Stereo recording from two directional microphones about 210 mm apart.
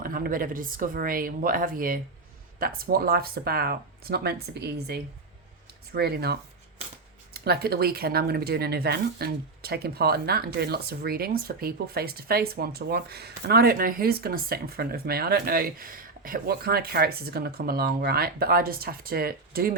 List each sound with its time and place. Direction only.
0.0 s speech: 40° right (ahead or behind)